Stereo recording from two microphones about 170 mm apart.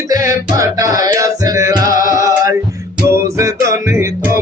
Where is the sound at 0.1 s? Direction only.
20° right (ahead or behind).